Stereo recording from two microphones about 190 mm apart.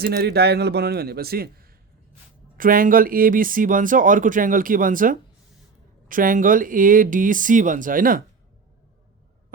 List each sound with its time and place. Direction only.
0.0 s a man's voice: 55° right (ahead or behind)